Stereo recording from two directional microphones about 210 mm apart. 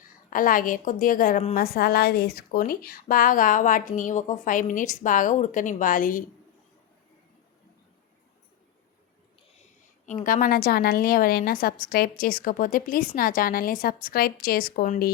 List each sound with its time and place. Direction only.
0.3 s a woman's voice: 40° left (ahead or behind)
10.1 s a woman's voice: 40° left (ahead or behind)